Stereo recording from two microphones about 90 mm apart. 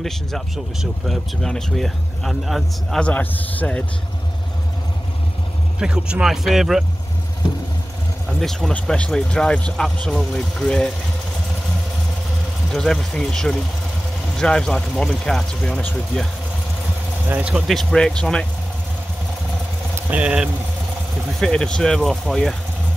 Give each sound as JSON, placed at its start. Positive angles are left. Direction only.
{"t": 0.0, "sound": "speech", "side_deg": 0}
{"t": 3.0, "sound": "speech", "side_deg": 20}
{"t": 5.8, "sound": "speech", "side_deg": -10}
{"t": 8.3, "sound": "speech", "side_deg": 5}
{"t": 12.7, "sound": "speech", "side_deg": 5}
{"t": 17.3, "sound": "speech", "side_deg": -15}
{"t": 17.6, "sound": "speech", "side_deg": 5}
{"t": 20.1, "sound": "speech", "side_deg": -15}
{"t": 21.4, "sound": "speech", "side_deg": 5}